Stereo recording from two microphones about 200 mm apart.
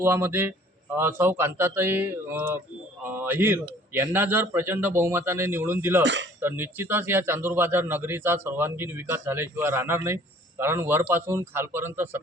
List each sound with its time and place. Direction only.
0.0 s a man's voice: 10° right (ahead or behind)
6.0 s speech: 65° right (ahead or behind)
6.4 s a man's voice: 10° right (ahead or behind)